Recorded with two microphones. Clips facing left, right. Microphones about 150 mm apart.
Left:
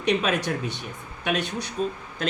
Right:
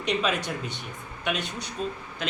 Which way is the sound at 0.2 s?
50° left (ahead or behind).